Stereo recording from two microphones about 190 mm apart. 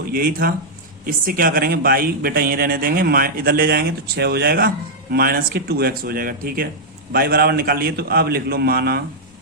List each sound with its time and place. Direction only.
0.1 s a man's voice: 50° right (ahead or behind)